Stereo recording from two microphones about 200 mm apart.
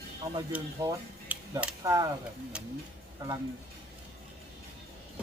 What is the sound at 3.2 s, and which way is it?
Speech, 15° right (ahead or behind).